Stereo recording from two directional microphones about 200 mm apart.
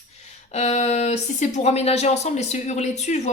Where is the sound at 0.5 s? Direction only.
35° left (ahead or behind).